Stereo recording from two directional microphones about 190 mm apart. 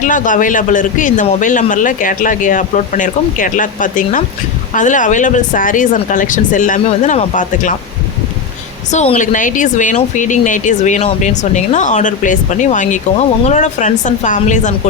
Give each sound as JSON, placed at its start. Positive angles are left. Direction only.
{"t": 0.0, "sound": "speech", "side_deg": 45}
{"t": 8.9, "sound": "speech", "side_deg": 40}